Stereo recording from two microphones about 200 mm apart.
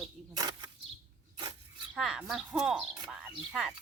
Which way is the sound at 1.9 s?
5° right (ahead or behind).